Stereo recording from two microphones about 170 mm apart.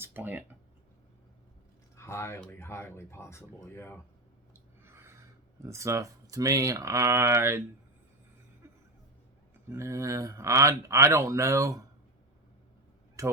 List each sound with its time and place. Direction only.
0.0 s speech: 10° right (ahead or behind)
2.0 s speech: 15° left (ahead or behind)
4.8 s a sound: 15° right (ahead or behind)
5.6 s speech: 15° right (ahead or behind)
8.6 s music: 15° right (ahead or behind)
9.6 s speech: 15° right (ahead or behind)
13.2 s speech: 20° right (ahead or behind)